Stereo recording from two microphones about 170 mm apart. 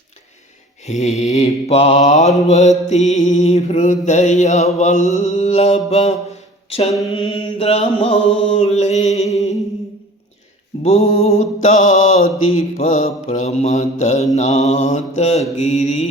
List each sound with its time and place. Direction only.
0.9 s mantra: 45° left (ahead or behind)
10.8 s mantra: 40° left (ahead or behind)